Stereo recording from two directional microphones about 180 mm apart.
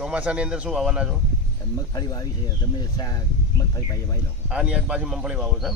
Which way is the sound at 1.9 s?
20° left (ahead or behind).